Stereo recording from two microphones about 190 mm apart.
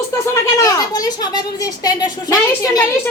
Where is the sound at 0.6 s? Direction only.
20° left (ahead or behind).